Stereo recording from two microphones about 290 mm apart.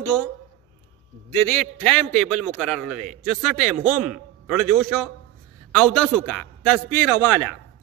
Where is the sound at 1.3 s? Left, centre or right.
Centre.